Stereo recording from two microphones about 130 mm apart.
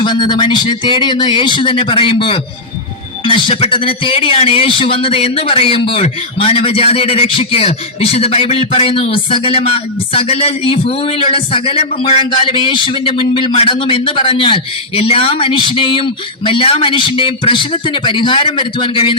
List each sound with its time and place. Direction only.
0.0 s a man's voice: 35° left (ahead or behind)